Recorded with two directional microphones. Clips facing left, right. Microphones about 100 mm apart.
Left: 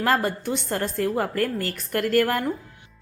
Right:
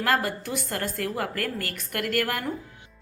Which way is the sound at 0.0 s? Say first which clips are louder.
Left 3 dB; 30° left (ahead or behind).